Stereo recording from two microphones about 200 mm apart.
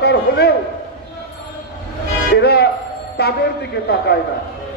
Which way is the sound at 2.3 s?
55° left (ahead or behind).